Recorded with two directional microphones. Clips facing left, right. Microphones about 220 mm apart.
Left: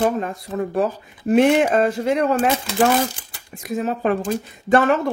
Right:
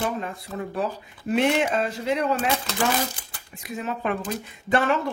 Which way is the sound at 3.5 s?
45° left (ahead or behind).